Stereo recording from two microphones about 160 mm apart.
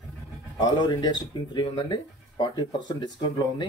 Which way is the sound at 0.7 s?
30° left (ahead or behind).